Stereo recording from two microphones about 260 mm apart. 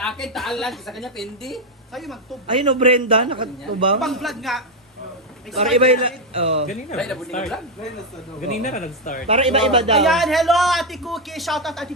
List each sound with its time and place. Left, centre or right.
0.0 s a woman's voice: centre
2.5 s a man's voice: centre
4.0 s a woman's voice: centre
5.7 s a man's voice: right
6.9 s a woman's voice: centre
8.4 s speech: left
9.2 s a man's voice: right
10.0 s a woman's voice: centre